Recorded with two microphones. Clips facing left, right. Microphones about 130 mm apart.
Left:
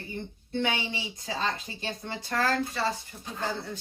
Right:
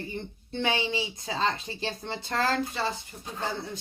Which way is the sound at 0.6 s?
25° right (ahead or behind).